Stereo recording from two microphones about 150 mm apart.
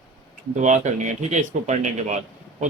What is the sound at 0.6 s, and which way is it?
Speech, 55° right (ahead or behind).